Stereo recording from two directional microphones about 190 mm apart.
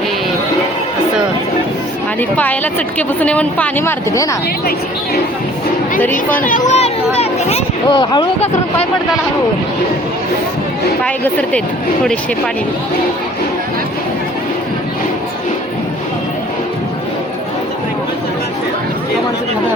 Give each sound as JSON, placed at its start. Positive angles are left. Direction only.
{"t": 2.3, "sound": "speech", "side_deg": 10}
{"t": 6.0, "sound": "speech", "side_deg": 10}
{"t": 6.4, "sound": "speech", "side_deg": 40}
{"t": 11.0, "sound": "speech", "side_deg": 5}